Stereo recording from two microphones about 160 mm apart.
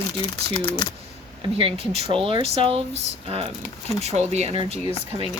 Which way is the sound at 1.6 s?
40° right (ahead or behind).